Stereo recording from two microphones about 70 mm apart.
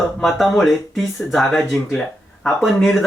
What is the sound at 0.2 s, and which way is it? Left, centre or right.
Speech, centre.